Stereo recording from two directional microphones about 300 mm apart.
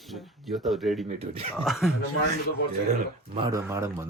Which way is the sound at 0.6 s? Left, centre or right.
Centre.